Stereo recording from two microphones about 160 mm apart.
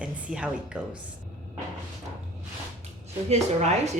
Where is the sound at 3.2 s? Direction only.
45° right (ahead or behind).